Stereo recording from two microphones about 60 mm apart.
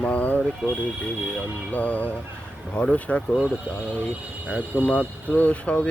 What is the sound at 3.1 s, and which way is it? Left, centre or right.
Speech, centre.